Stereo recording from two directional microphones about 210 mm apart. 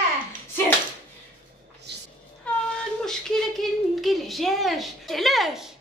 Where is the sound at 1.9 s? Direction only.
55° right (ahead or behind).